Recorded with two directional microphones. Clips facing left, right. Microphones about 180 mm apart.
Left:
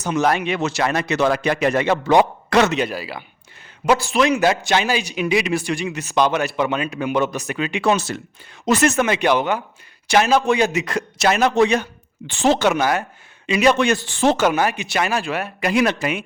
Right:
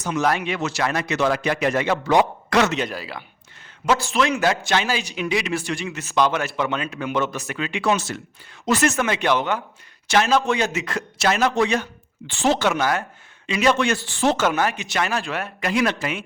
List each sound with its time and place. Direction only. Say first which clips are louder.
0.0 s speech: left 3 dB; 20° left (ahead or behind)
2.7 s speech: left 3 dB; 5° left (ahead or behind)
7.9 s speech: left 2 dB; 35° left (ahead or behind)
8.6 s speech: left 3 dB; 20° left (ahead or behind)